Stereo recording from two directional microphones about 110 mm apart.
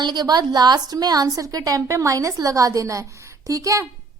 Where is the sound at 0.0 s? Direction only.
40° right (ahead or behind).